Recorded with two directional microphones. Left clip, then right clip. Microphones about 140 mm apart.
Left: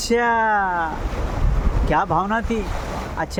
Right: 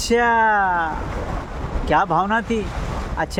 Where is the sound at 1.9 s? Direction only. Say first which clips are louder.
Right 2 dB; 25° right (ahead or behind).